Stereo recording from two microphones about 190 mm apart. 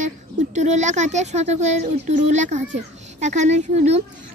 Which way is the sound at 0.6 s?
40° right (ahead or behind).